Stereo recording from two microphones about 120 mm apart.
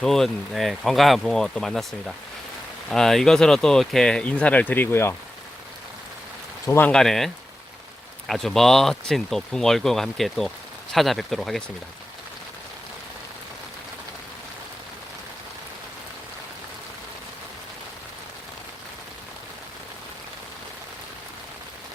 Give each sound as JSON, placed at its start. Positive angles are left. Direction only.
{"t": 0.0, "sound": "speech", "side_deg": 5}
{"t": 6.7, "sound": "speech", "side_deg": 20}
{"t": 6.9, "sound": "speech", "side_deg": 5}
{"t": 8.3, "sound": "speech", "side_deg": 5}